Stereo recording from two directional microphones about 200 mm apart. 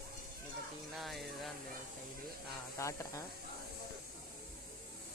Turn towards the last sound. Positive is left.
turn(degrees=15)  # may be behind; listen again after turning